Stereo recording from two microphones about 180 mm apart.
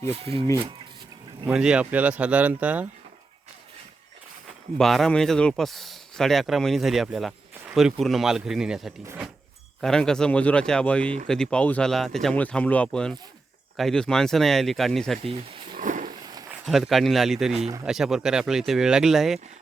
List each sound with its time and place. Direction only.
0.1 s speech: 30° right (ahead or behind)
1.5 s speech: 5° right (ahead or behind)
4.8 s speech: centre (ahead or behind)
9.8 s speech: 5° left (ahead or behind)
15.2 s wild animals: 30° right (ahead or behind)
15.8 s a sound: 45° right (ahead or behind)
16.2 s a sound: 20° right (ahead or behind)
16.6 s speech: centre (ahead or behind)